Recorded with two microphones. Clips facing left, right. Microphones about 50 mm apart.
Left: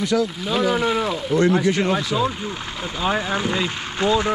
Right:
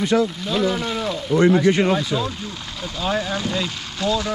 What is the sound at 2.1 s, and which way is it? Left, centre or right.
Speech, centre.